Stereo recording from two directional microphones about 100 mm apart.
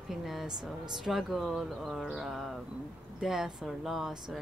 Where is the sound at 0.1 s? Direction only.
5° right (ahead or behind).